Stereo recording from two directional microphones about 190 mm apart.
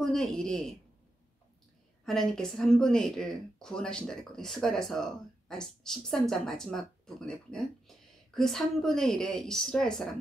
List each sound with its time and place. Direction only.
0.0 s speech: centre (ahead or behind)
2.0 s speech: centre (ahead or behind)